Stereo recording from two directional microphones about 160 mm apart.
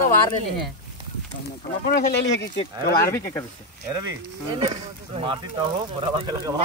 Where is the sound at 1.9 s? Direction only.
90° left.